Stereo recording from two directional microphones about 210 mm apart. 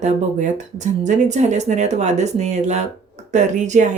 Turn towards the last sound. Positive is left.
turn(degrees=-35)  # may be behind; listen again after turning